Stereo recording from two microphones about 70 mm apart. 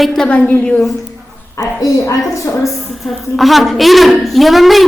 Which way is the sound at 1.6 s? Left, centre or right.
Left.